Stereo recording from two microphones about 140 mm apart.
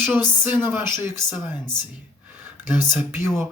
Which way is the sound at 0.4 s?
10° right (ahead or behind).